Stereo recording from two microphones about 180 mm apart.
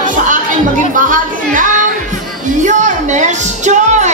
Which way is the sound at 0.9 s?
45° right (ahead or behind).